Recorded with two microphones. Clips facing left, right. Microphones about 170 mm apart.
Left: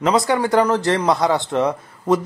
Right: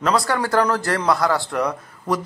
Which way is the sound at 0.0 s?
20° left (ahead or behind).